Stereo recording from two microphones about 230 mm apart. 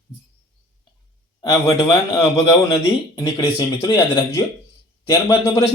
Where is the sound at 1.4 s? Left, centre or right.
Centre.